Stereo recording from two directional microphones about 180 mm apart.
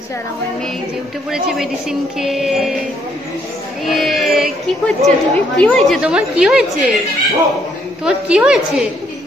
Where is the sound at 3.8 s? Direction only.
Centre (ahead or behind).